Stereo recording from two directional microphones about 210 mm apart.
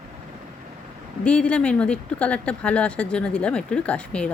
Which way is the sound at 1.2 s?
5° left (ahead or behind).